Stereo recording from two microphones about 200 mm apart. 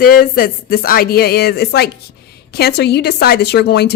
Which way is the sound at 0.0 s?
45° left (ahead or behind).